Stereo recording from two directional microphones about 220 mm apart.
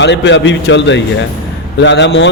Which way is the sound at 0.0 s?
55° left (ahead or behind).